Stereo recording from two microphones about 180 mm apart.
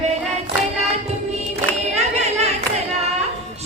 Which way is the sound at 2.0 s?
35° right (ahead or behind).